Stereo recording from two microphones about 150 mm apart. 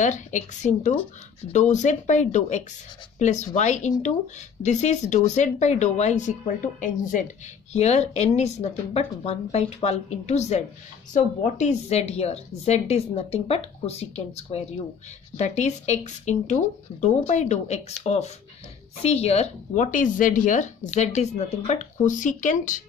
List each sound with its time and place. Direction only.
0.0 s a woman's voice: 55° left (ahead or behind)
7.7 s a woman's voice: 45° left (ahead or behind)